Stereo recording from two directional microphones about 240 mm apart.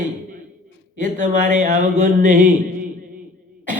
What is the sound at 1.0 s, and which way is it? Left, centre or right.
A man's voice, right.